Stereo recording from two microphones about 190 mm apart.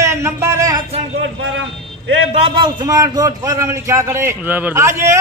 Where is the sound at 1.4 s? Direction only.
90° right.